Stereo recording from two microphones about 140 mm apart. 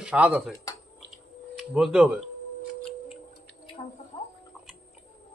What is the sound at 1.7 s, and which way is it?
Speech, 5° right (ahead or behind).